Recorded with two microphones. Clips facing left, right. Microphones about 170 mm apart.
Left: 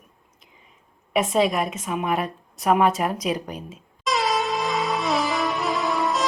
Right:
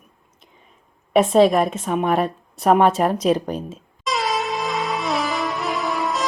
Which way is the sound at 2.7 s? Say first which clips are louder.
Right 4 dB; 35° right (ahead or behind).